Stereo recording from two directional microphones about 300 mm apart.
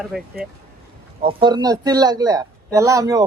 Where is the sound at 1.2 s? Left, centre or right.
Centre.